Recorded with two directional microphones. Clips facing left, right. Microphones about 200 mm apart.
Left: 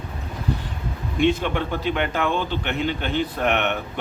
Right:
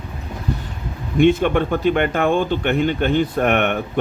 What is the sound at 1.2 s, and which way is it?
Speech, 50° right (ahead or behind).